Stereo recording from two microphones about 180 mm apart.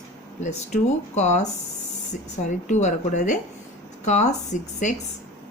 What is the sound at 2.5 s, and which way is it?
Speech, 45° left (ahead or behind).